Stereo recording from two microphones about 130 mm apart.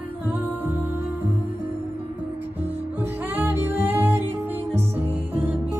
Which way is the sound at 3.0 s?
15° right (ahead or behind).